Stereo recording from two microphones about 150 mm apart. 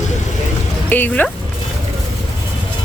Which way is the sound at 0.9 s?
10° left (ahead or behind).